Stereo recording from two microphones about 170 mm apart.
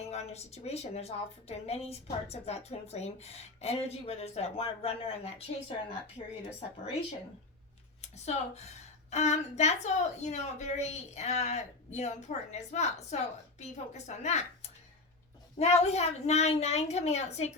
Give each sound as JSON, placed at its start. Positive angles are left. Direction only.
{"t": 0.1, "sound": "a woman's voice", "side_deg": 40}
{"t": 8.0, "sound": "a woman's voice", "side_deg": 40}